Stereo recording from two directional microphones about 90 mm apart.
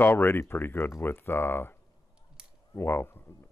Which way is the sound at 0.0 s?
25° left (ahead or behind).